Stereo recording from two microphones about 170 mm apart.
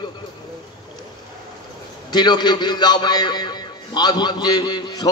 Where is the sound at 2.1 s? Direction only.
25° left (ahead or behind).